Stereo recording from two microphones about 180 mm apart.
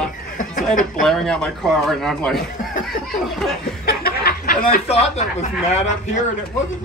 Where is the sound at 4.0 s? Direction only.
55° left (ahead or behind).